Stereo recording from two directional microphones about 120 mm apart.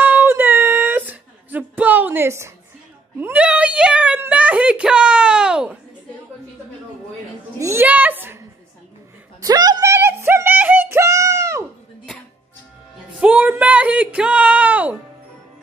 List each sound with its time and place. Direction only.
0.0 s a sound: 15° right (ahead or behind)
3.2 s a child's voice: 15° right (ahead or behind)
7.5 s a child's voice: 25° right (ahead or behind)
7.8 s a woman's voice: 15° right (ahead or behind)
9.4 s music: 30° right (ahead or behind)
13.2 s speech: 15° right (ahead or behind)